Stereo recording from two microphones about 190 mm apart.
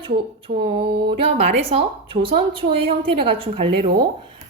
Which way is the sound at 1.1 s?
30° right (ahead or behind).